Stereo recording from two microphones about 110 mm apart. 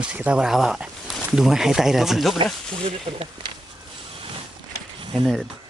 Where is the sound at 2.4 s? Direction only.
55° right (ahead or behind).